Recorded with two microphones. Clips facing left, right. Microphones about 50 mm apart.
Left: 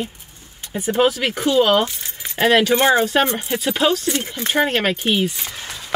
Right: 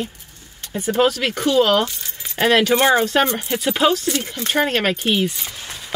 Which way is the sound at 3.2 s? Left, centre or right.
Centre.